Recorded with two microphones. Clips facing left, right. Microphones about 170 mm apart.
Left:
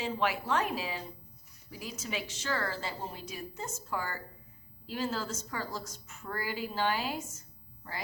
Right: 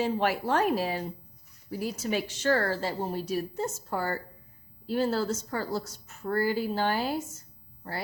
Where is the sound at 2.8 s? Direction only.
40° right (ahead or behind).